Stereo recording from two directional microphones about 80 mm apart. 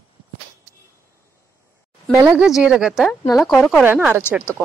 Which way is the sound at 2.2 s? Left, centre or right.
Centre.